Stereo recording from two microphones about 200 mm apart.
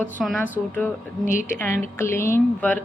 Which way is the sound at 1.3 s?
40° left (ahead or behind).